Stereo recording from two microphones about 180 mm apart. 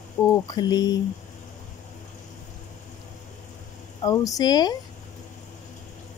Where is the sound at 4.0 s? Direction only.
20° left (ahead or behind).